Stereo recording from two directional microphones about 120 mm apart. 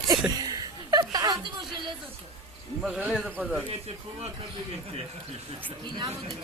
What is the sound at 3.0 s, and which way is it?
Speech, 15° right (ahead or behind).